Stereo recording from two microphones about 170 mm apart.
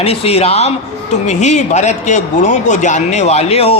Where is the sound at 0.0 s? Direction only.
35° left (ahead or behind).